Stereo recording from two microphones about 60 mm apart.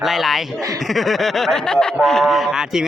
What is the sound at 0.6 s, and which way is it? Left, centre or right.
Speech, right.